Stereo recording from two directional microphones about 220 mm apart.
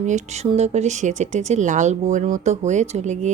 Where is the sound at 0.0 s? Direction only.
30° right (ahead or behind).